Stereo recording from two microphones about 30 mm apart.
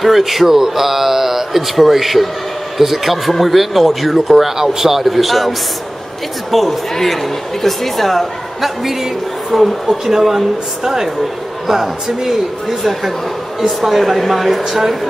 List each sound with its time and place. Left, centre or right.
0.0 s a woman's voice: centre
4.6 s a woman's voice: centre
6.5 s a woman's voice: centre
10.0 s a woman's voice: centre